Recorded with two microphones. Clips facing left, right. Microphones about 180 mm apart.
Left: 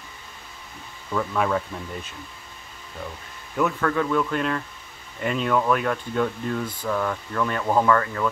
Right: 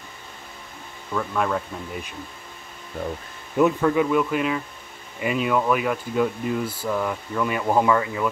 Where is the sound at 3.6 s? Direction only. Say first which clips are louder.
Right 4 dB; 15° right (ahead or behind).